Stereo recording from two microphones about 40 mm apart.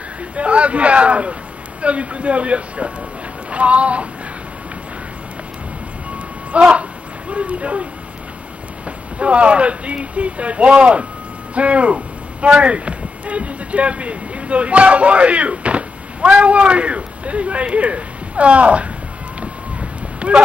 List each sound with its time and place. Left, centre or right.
0.4 s speech: right
6.5 s speech: right
19.4 s a sound: right